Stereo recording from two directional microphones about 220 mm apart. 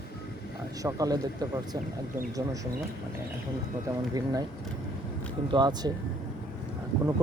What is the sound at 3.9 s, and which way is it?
Speech, 15° right (ahead or behind).